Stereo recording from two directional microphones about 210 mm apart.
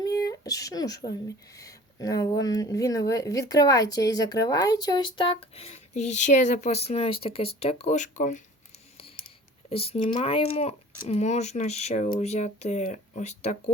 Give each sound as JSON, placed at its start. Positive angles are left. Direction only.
{"t": 0.0, "sound": "a sound", "side_deg": 15}
{"t": 1.5, "sound": "speech", "side_deg": 15}
{"t": 9.6, "sound": "speech", "side_deg": 25}